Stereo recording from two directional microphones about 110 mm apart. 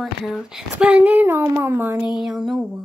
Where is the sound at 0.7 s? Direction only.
15° right (ahead or behind).